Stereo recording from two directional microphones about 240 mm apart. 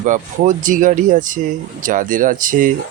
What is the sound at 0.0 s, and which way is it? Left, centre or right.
Speech, right.